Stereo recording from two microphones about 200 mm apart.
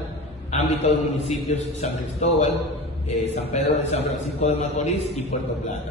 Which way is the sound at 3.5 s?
30° left (ahead or behind).